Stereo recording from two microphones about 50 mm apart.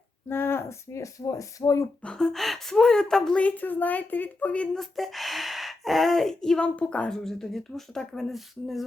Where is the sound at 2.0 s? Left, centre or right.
Centre.